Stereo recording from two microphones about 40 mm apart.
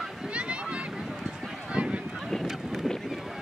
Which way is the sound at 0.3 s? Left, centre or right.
Right.